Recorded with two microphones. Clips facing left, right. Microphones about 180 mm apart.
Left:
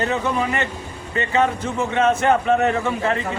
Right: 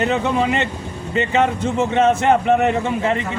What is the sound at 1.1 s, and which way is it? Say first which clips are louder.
A man's voice: right 2 dB; 20° right (ahead or behind).